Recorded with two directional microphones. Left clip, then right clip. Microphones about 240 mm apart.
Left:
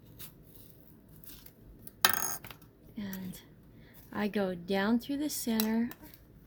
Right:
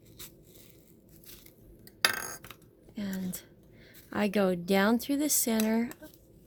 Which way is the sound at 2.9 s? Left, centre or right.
Right.